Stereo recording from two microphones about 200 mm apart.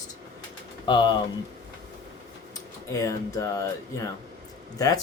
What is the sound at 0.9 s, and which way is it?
Speech, 20° left (ahead or behind).